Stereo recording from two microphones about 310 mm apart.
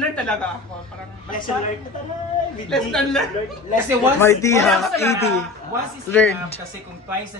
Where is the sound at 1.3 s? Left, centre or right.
Left.